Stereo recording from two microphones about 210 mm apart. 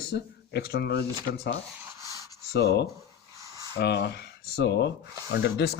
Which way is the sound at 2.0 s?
15° right (ahead or behind).